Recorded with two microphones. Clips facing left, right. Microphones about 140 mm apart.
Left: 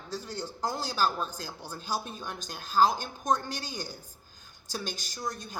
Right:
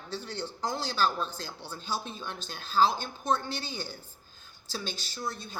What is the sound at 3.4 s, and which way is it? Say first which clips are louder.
Speech: right 1 dB; 45° left (ahead or behind).